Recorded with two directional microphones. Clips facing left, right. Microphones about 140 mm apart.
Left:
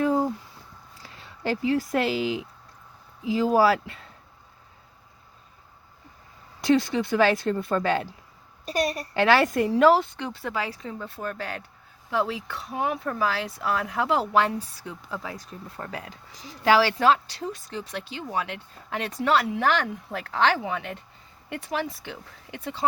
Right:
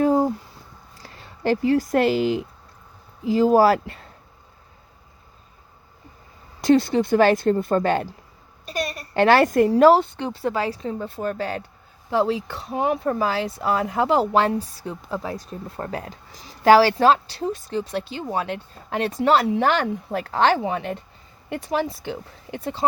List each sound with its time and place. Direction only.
0.0 s a sound: 40° right (ahead or behind)
1.0 s speech: 45° right (ahead or behind)
6.6 s speech: 40° right (ahead or behind)
9.1 s speech: 45° right (ahead or behind)